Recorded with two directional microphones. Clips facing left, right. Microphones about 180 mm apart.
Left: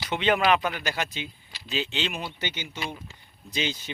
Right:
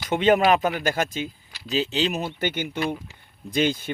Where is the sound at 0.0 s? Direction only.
45° right (ahead or behind).